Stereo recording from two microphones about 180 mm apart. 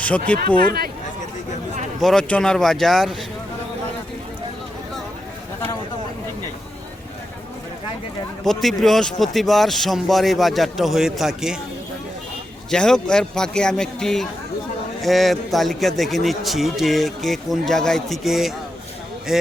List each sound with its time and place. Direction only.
0.4 s speech: 25° left (ahead or behind)
2.0 s a man's voice: centre (ahead or behind)
8.4 s a man's voice: centre (ahead or behind)
12.7 s a man's voice: 5° left (ahead or behind)